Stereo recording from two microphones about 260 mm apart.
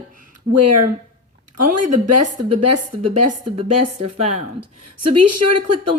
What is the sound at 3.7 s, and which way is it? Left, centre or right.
A woman's voice, right.